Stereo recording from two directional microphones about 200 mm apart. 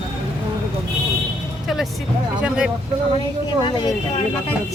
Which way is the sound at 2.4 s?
5° right (ahead or behind).